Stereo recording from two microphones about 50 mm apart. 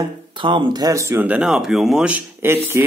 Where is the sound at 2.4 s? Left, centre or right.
Right.